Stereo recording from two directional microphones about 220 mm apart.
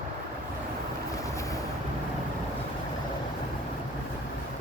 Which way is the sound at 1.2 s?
15° left (ahead or behind).